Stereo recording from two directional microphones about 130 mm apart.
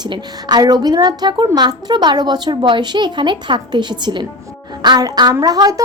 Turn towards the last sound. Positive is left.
turn(degrees=-30)  # may be behind; listen again after turning